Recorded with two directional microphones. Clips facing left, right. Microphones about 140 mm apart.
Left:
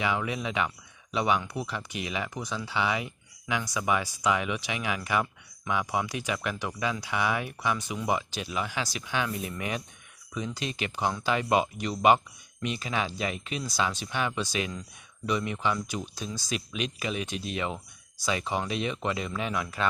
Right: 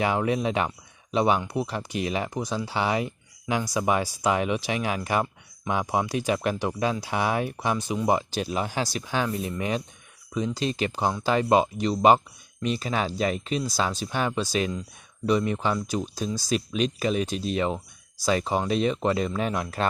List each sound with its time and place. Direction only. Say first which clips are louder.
0.0 s speech: right 6 dB; 40° right (ahead or behind)